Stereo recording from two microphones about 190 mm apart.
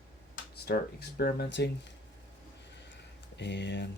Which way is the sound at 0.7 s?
55° left (ahead or behind).